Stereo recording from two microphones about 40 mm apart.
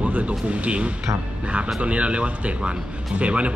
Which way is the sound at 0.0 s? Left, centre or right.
Right.